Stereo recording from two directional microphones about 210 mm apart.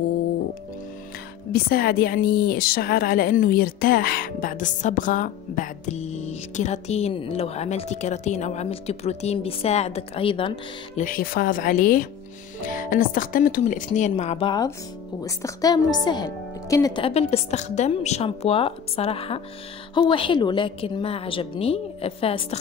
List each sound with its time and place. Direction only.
1.5 s a woman's voice: 45° left (ahead or behind); by 11.1 s 25° left (ahead or behind)
11.1 s a woman's voice: 40° left (ahead or behind); by 22.6 s 25° left (ahead or behind)